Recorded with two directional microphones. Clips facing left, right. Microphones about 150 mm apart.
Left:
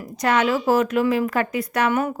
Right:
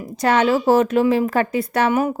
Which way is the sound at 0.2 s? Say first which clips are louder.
Right 3 dB; 30° right (ahead or behind).